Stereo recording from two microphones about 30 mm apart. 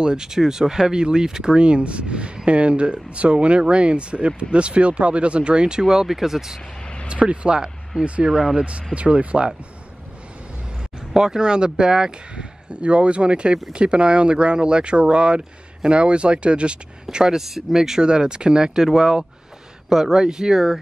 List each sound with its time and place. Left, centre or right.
0.0 s speech: right
5.9 s speech: centre
7.1 s speech: right
8.3 s speech: centre
8.9 s speech: right
11.1 s speech: right
12.8 s speech: right
17.1 s speech: right
17.4 s speech: centre
18.0 s speech: right
20.5 s speech: centre